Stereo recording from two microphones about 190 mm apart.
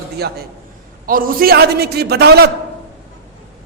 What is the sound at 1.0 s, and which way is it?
A man's voice, 50° right (ahead or behind).